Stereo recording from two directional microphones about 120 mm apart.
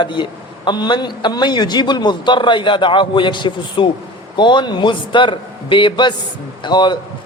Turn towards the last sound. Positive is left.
turn(degrees=40)  # may be behind; listen again after turning